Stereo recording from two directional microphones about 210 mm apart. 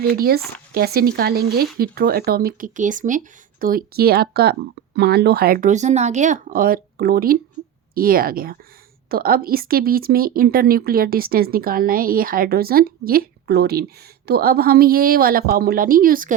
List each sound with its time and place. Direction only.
0.0 s speech: 45° right (ahead or behind)